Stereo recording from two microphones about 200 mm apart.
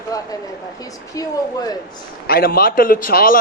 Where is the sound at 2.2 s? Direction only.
50° left (ahead or behind).